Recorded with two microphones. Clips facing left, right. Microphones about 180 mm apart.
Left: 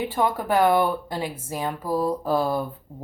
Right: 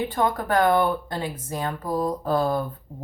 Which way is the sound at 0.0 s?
10° left (ahead or behind).